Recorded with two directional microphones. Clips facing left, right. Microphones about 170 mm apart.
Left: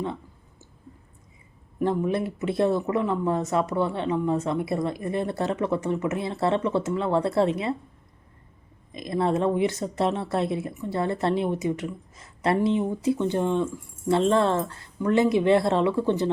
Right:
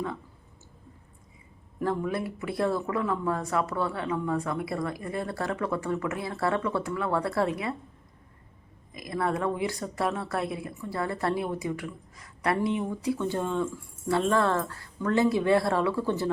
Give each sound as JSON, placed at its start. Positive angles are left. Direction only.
{"t": 1.8, "sound": "speech", "side_deg": 20}
{"t": 8.9, "sound": "speech", "side_deg": 25}